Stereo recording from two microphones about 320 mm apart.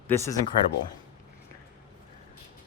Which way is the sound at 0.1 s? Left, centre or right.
Centre.